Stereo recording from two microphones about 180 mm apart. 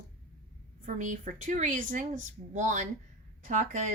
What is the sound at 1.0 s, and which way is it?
A woman's voice, 45° right (ahead or behind).